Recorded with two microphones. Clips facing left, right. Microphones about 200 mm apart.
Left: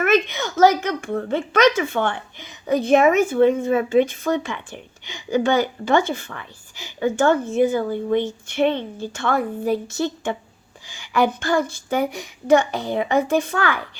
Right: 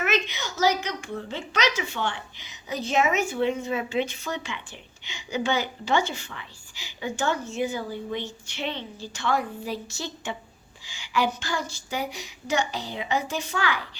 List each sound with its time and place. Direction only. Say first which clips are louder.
0.0 s a woman's voice: left 8 dB; 55° left (ahead or behind)